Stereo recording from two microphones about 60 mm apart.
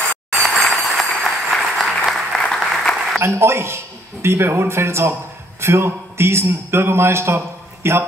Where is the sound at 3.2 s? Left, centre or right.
Right.